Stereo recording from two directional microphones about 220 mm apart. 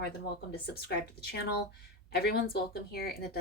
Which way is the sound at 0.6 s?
45° left (ahead or behind).